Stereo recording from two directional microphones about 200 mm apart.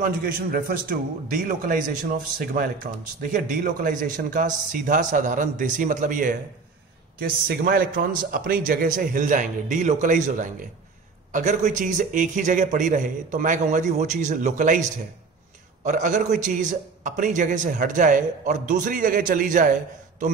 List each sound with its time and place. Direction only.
0.0 s a man's voice: 45° right (ahead or behind)